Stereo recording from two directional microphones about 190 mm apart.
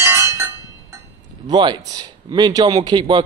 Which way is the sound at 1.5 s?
25° right (ahead or behind).